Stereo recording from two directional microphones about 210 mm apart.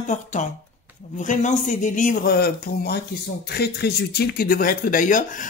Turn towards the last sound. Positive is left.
turn(degrees=40)  # may be behind; listen again after turning